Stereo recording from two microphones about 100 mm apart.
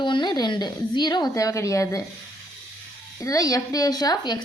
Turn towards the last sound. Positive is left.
turn(degrees=40)  # may be behind; listen again after turning